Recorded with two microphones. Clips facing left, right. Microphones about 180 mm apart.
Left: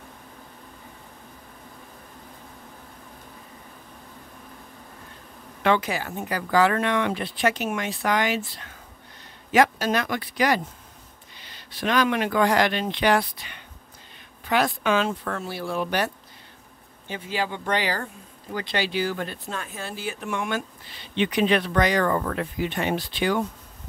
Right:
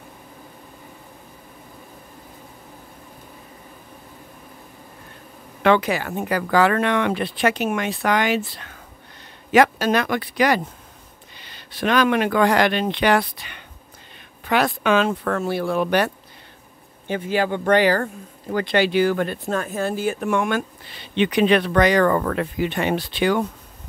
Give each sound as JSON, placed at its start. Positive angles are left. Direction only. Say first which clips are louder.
{"t": 5.6, "sound": "speech", "louder": "right 5 dB", "side_deg": -70}
{"t": 17.1, "sound": "speech", "louder": "right 7 dB", "side_deg": -55}